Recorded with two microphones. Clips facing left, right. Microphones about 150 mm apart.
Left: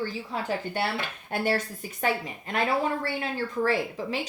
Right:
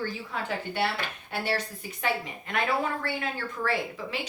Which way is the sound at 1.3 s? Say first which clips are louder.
Left 4 dB; 45° left (ahead or behind).